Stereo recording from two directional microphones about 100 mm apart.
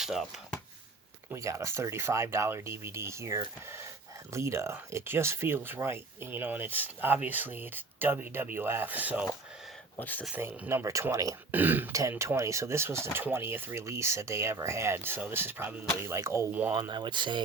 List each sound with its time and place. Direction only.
0.0 s speech: 5° right (ahead or behind)
1.3 s speech: 30° right (ahead or behind)
10.0 s speech: 15° left (ahead or behind)
10.3 s speech: 20° right (ahead or behind)
11.5 s speech: 20° right (ahead or behind)
11.9 s speech: 30° right (ahead or behind)
16.5 s speech: 15° right (ahead or behind)
16.7 s speech: 50° right (ahead or behind)